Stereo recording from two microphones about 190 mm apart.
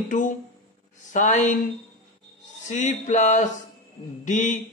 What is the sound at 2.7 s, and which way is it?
A man's voice, 40° left (ahead or behind).